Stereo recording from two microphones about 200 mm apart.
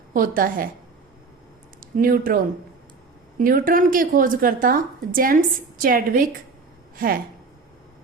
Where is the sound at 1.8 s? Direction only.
45° right (ahead or behind).